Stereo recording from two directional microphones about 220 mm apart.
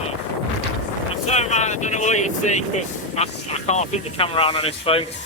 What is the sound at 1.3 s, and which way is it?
Speech, 30° left (ahead or behind).